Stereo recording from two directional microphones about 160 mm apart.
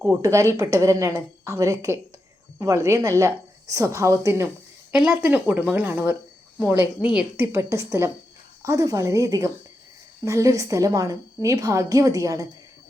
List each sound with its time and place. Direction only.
0.0 s a woman's voice: 15° right (ahead or behind)
4.9 s a woman's voice: 5° right (ahead or behind); by 12.5 s 20° right (ahead or behind)